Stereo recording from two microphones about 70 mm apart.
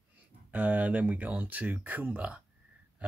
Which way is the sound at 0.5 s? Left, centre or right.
Right.